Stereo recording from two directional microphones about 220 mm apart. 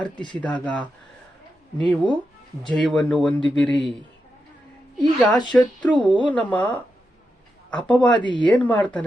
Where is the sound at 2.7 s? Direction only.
5° left (ahead or behind).